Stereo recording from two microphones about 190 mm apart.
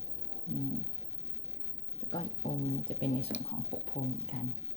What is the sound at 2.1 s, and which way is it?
Speech, 25° left (ahead or behind).